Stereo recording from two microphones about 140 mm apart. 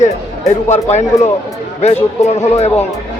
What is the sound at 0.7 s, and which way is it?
Speech, 55° left (ahead or behind).